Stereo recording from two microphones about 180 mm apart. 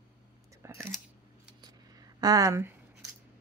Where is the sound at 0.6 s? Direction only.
15° right (ahead or behind).